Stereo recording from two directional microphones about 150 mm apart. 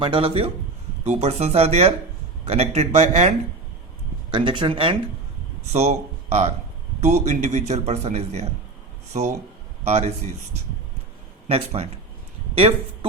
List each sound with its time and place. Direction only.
0.0 s a man's voice: 35° right (ahead or behind)
4.3 s speech: 30° right (ahead or behind)
5.7 s a man's voice: 45° right (ahead or behind)
9.1 s a man's voice: 55° right (ahead or behind)
11.4 s a man's voice: 45° right (ahead or behind)